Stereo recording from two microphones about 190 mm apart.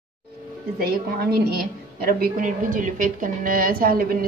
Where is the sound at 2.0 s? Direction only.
50° right (ahead or behind).